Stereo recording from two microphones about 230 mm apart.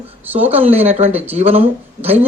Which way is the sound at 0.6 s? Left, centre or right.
Right.